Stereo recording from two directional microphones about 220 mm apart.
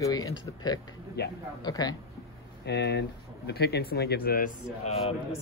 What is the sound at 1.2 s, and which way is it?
Speech, 50° left (ahead or behind).